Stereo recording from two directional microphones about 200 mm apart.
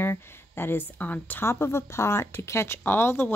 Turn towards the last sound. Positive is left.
turn(degrees=10)  # may be behind; listen again after turning